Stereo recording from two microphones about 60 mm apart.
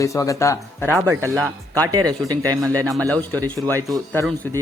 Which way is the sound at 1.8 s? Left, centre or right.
Right.